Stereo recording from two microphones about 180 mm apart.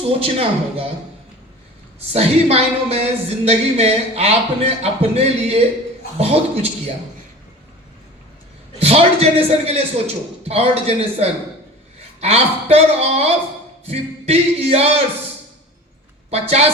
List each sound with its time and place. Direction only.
0.1 s music: 35° right (ahead or behind)
2.1 s music: 35° right (ahead or behind)
8.8 s music: 35° right (ahead or behind)
16.3 s music: 35° right (ahead or behind)